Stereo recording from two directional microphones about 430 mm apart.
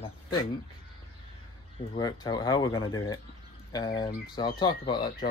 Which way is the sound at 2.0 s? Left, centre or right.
Centre.